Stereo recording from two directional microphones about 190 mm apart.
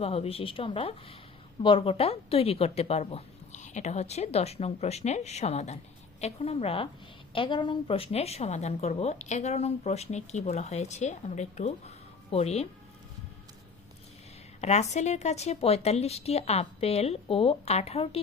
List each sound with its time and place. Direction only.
0.0 s a woman's voice: 30° left (ahead or behind)
14.6 s a woman's voice: 35° left (ahead or behind)